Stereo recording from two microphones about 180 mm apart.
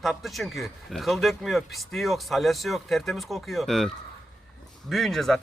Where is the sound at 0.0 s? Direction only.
Centre (ahead or behind).